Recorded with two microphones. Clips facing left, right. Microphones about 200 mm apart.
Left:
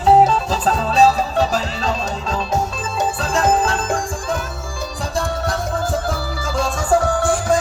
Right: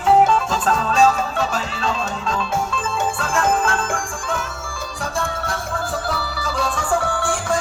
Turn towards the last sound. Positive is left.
turn(degrees=40)  # may be behind; listen again after turning